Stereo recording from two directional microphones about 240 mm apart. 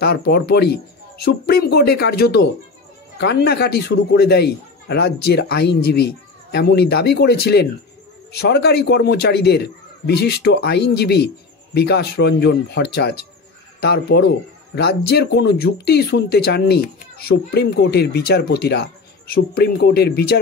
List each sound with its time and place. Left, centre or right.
0.0 s speech: left